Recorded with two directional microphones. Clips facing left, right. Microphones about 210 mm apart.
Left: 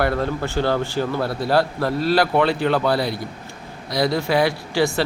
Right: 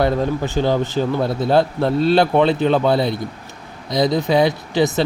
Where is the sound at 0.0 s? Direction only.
15° right (ahead or behind).